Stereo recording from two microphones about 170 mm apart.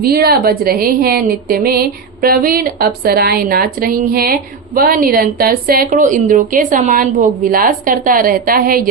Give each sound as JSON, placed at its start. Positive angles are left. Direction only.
{"t": 0.0, "sound": "a woman's voice", "side_deg": -65}